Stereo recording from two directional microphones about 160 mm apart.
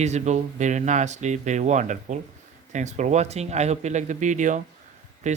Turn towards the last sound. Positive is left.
turn(degrees=-50)  # may be behind; listen again after turning